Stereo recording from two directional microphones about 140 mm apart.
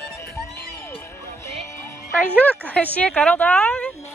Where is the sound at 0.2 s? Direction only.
20° left (ahead or behind).